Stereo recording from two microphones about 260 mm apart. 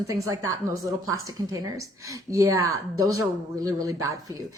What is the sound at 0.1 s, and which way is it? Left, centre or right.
A woman's voice, centre.